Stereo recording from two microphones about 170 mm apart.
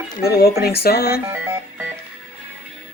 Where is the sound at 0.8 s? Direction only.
65° left (ahead or behind).